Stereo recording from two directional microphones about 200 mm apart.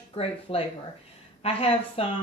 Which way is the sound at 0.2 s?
30° left (ahead or behind).